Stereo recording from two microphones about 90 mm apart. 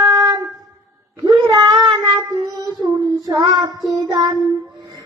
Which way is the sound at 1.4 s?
50° right (ahead or behind).